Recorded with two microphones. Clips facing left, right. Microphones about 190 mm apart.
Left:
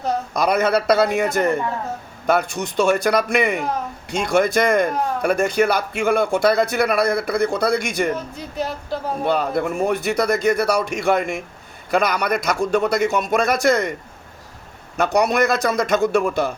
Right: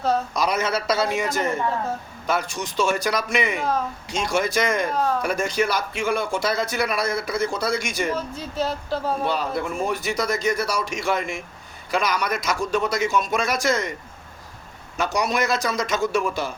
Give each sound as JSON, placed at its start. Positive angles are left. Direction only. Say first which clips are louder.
{"t": 0.3, "sound": "speech", "louder": "left 5 dB", "side_deg": 55}
{"t": 8.1, "sound": "speech", "louder": "even", "side_deg": 15}
{"t": 9.2, "sound": "speech", "louder": "left 5 dB", "side_deg": 55}
{"t": 14.9, "sound": "speech", "louder": "left 6 dB", "side_deg": 55}